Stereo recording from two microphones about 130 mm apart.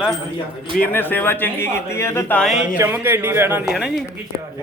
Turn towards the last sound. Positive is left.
turn(degrees=0)  # may be behind; listen again after turning